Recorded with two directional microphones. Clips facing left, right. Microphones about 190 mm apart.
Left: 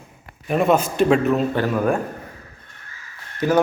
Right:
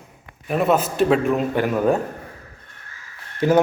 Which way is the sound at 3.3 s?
25° right (ahead or behind).